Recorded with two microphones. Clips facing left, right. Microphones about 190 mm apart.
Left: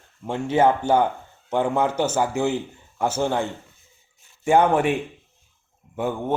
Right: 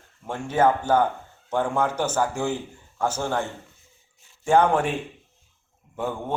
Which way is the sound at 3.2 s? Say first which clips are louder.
Left 5 dB; 20° left (ahead or behind).